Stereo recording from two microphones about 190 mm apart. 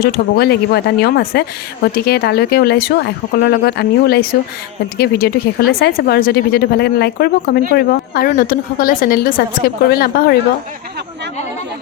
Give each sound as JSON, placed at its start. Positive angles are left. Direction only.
{"t": 0.0, "sound": "a woman's voice", "side_deg": 55}